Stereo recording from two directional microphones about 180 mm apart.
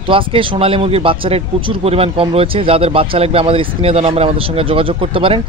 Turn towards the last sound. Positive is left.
turn(degrees=-30)  # may be behind; listen again after turning